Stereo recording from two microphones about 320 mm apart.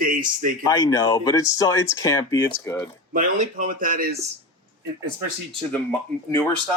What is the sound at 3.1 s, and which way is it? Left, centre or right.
Speech, right.